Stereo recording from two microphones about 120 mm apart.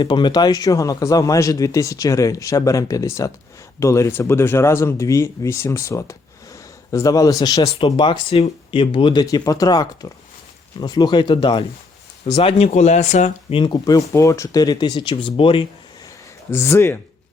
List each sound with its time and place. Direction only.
0.0 s speech: 40° left (ahead or behind)
9.2 s speech: 30° left (ahead or behind); by 13.3 s 80° left
13.5 s speech: 45° left (ahead or behind)
16.0 s a sound: 25° left (ahead or behind)